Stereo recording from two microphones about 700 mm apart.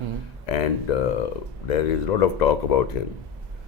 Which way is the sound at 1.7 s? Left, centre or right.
Left.